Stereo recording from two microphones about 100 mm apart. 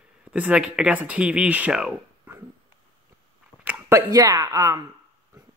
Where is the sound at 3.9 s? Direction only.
35° right (ahead or behind).